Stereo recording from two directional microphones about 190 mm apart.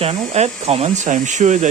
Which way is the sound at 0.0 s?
35° right (ahead or behind).